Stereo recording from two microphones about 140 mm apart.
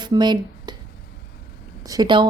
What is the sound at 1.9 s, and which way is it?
Speech, 30° right (ahead or behind).